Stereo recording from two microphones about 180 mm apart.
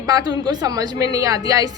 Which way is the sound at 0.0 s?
20° right (ahead or behind).